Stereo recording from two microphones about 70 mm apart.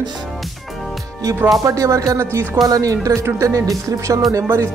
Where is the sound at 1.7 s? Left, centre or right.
Right.